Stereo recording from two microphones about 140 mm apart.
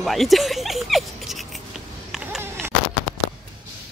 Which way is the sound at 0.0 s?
Centre (ahead or behind).